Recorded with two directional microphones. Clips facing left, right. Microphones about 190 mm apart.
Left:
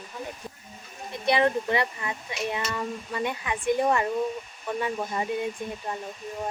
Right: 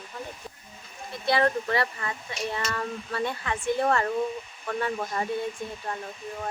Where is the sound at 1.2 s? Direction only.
20° left (ahead or behind).